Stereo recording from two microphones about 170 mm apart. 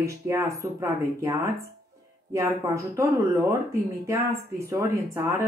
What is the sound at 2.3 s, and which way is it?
A woman's voice, 20° right (ahead or behind).